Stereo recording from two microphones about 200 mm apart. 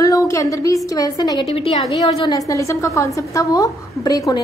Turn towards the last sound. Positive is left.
turn(degrees=20)  # may be behind; listen again after turning